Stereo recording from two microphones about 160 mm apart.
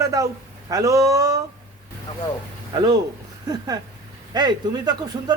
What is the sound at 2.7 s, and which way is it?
Speech, 30° right (ahead or behind).